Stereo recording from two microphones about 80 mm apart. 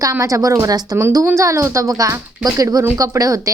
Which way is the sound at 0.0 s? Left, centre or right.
Right.